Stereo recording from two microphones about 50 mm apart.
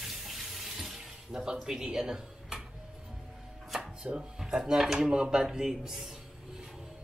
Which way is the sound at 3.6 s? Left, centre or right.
Centre.